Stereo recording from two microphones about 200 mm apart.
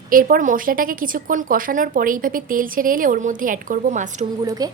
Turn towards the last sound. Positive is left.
turn(degrees=-40)  # may be behind; listen again after turning